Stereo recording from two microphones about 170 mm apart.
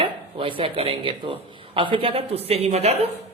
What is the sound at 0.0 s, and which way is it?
A man's voice, 30° right (ahead or behind).